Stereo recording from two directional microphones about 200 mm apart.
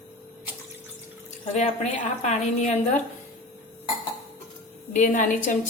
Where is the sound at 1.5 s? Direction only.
35° left (ahead or behind).